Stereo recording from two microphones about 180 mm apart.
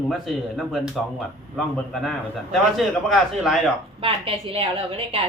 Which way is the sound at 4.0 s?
30° right (ahead or behind).